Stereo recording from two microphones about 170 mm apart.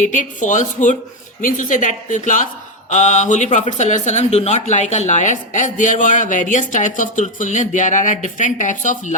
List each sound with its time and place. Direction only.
0.0 s speech: 45° left (ahead or behind)